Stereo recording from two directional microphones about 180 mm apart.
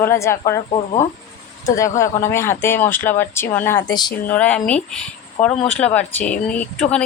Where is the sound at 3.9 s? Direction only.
25° left (ahead or behind).